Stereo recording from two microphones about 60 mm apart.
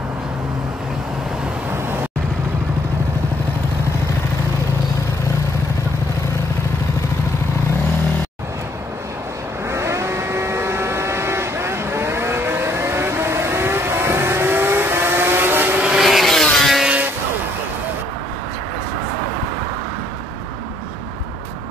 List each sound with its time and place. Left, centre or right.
1.7 s vehicle: right
9.7 s vehicle: right
16.0 s vehicle: centre